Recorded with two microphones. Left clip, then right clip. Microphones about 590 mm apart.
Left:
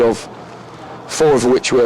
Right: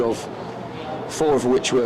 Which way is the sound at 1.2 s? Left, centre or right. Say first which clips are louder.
Left 6 dB; left.